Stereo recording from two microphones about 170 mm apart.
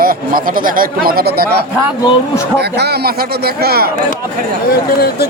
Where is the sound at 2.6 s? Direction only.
75° right (ahead or behind).